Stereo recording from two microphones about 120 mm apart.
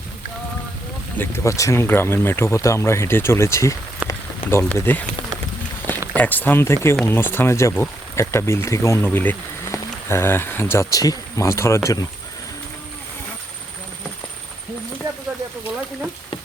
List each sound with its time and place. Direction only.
1.2 s speech: 25° left (ahead or behind)
4.0 s rain on surface: 10° right (ahead or behind)
4.4 s speech: 20° left (ahead or behind)
6.1 s speech: 15° left (ahead or behind)